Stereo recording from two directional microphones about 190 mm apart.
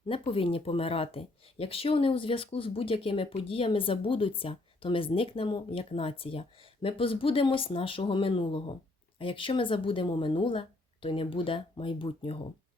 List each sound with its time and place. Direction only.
0.1 s speech: 30° left (ahead or behind)